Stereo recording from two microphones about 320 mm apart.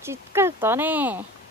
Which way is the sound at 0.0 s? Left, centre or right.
Centre.